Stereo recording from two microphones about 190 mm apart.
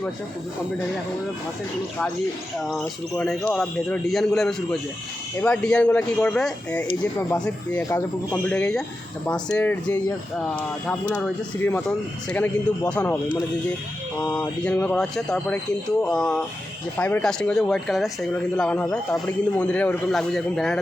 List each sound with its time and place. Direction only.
2.6 s speech: centre (ahead or behind); by 8.4 s 15° left (ahead or behind)
8.4 s speech: 5° left (ahead or behind)
14.3 s speech: 5° left (ahead or behind)